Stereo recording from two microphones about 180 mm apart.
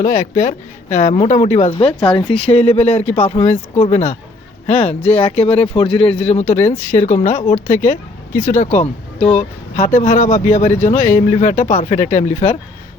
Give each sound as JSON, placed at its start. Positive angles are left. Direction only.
{"t": 0.0, "sound": "speech", "side_deg": 45}
{"t": 8.4, "sound": "speech", "side_deg": 45}